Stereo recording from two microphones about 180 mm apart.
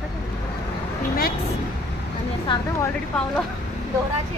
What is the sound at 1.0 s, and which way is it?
Speech, 55° left (ahead or behind).